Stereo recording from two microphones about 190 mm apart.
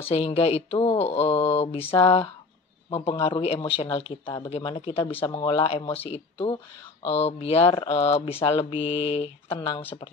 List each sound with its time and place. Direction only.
0.1 s speech: 30° left (ahead or behind)